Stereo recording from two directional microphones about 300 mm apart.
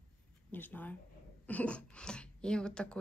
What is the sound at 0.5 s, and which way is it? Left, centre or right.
Speech, centre.